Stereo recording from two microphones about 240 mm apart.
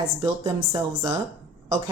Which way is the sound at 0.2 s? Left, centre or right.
Centre.